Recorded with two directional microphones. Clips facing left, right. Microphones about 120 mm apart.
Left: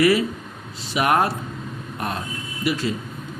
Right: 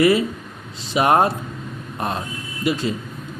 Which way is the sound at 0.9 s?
25° right (ahead or behind).